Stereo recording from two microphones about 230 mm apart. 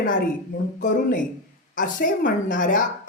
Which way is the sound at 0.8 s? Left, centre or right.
Left.